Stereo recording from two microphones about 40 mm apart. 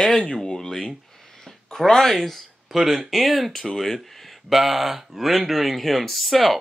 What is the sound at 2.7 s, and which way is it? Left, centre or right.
Speech, centre.